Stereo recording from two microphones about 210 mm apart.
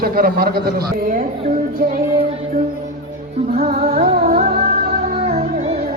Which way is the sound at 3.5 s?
30° right (ahead or behind).